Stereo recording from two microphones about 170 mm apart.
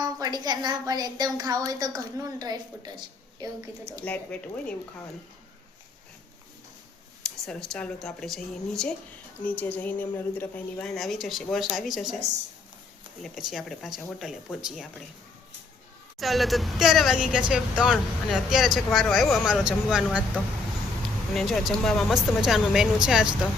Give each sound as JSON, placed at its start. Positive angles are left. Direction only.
{"t": 0.0, "sound": "a woman's voice", "side_deg": -25}
{"t": 4.0, "sound": "speech", "side_deg": 10}
{"t": 7.4, "sound": "speech", "side_deg": 5}
{"t": 13.2, "sound": "speech", "side_deg": 0}
{"t": 16.1, "sound": "speech", "side_deg": 0}
{"t": 21.3, "sound": "speech", "side_deg": 0}